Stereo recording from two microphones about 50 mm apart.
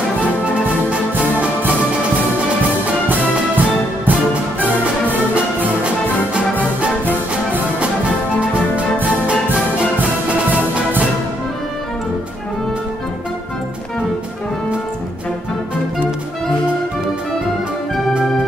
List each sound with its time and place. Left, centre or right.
0.8 s music: right
3.1 s music: right
9.2 s music: right